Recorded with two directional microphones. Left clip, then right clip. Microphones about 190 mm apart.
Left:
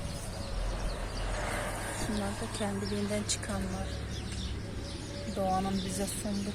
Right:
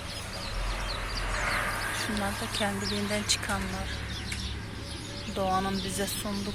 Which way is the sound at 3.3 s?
10° left (ahead or behind).